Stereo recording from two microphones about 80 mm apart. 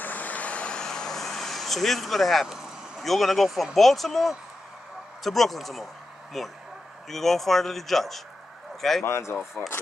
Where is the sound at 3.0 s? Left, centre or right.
Centre.